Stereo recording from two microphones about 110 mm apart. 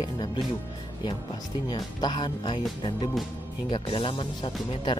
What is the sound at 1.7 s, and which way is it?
Speech, 40° left (ahead or behind).